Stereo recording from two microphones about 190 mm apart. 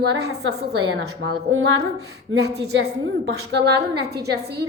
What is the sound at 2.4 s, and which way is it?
A woman's voice, 60° right (ahead or behind).